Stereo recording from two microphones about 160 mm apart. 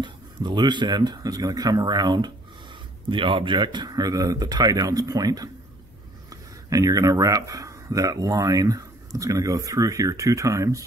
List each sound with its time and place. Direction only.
0.0 s speech: 30° right (ahead or behind)